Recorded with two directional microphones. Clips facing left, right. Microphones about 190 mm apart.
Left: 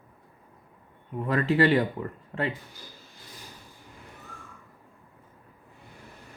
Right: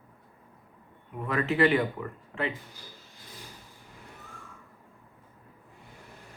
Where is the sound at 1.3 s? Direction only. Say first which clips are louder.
Left 2 dB; 35° left (ahead or behind).